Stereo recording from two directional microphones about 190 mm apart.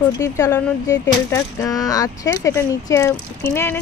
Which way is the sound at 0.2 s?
15° left (ahead or behind).